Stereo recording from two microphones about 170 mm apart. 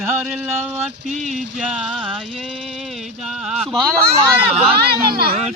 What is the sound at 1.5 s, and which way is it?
Speech, centre (ahead or behind).